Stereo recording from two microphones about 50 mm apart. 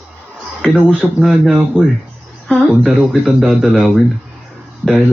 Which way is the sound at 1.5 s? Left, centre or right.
Right.